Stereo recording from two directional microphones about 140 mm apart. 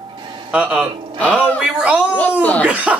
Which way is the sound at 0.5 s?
5° right (ahead or behind).